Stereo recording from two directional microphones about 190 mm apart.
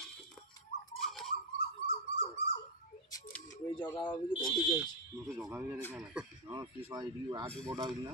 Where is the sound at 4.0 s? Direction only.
25° left (ahead or behind).